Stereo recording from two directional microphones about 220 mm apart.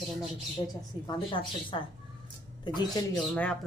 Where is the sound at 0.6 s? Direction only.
20° left (ahead or behind).